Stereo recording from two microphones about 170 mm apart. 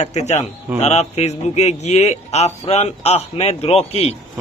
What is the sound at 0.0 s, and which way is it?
A man's voice, 40° left (ahead or behind).